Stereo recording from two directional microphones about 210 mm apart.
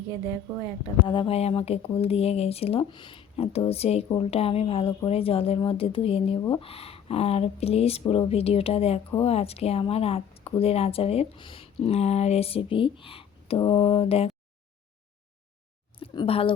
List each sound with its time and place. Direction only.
1.0 s speech: 20° left (ahead or behind)
16.0 s speech: 25° left (ahead or behind)